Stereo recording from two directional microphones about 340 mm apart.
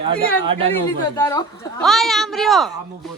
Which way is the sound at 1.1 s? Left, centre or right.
Centre.